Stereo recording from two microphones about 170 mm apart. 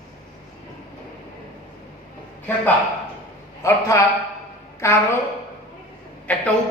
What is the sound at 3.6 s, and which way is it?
A man's voice, 20° left (ahead or behind).